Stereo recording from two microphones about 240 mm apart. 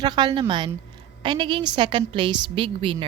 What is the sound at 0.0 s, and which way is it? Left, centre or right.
A woman's voice, centre.